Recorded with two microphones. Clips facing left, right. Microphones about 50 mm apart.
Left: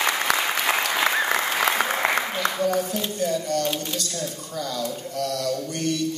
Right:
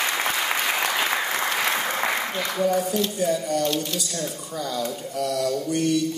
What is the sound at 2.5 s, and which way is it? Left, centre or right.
Mantra, centre.